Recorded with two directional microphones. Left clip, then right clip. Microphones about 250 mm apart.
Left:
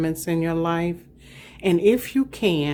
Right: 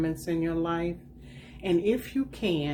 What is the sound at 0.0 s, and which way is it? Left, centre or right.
Speech, left.